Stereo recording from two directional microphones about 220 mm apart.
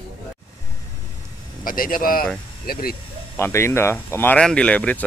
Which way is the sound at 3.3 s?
10° left (ahead or behind).